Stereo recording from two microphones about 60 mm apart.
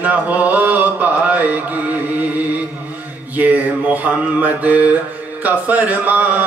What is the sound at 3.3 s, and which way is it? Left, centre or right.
Mantra, right.